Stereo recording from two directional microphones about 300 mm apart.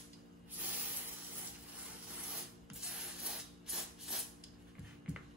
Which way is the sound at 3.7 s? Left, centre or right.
Centre.